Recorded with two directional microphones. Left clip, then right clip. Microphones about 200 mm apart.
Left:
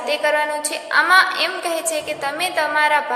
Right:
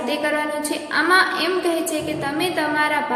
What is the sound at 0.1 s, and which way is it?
A woman's voice, 25° left (ahead or behind).